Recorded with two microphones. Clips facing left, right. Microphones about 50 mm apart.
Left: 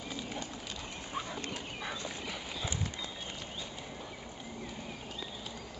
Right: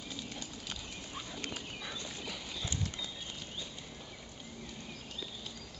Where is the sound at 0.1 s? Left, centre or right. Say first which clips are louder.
Left 5 dB; centre.